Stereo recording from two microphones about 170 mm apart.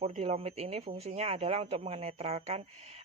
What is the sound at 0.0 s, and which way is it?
A woman's voice, 40° right (ahead or behind).